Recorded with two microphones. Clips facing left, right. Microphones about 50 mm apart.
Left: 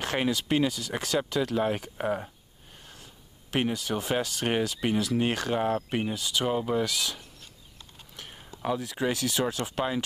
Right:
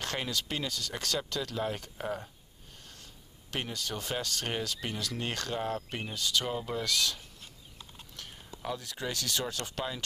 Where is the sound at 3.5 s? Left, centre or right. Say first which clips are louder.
Left 8 dB; centre.